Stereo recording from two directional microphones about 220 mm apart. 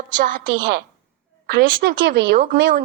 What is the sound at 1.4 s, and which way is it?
A woman's voice, 45° right (ahead or behind).